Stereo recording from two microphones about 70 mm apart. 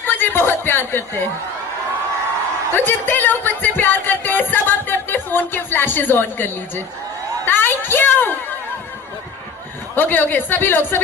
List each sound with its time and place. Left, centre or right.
0.0 s chuckle: left
2.7 s speech: left
7.4 s a sound: left
9.9 s speech: left